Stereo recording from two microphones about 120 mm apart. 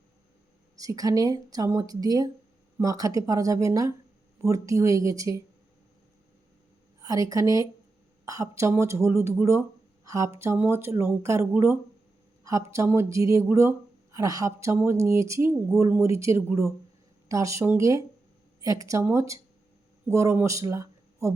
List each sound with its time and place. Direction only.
0.8 s speech: 30° right (ahead or behind)
7.0 s speech: 30° right (ahead or behind)